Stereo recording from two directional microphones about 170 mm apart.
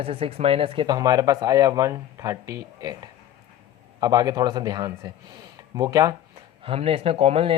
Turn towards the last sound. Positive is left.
turn(degrees=-35)  # may be behind; listen again after turning